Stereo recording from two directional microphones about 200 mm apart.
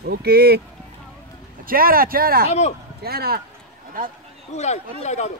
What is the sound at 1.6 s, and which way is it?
Speech, 45° right (ahead or behind).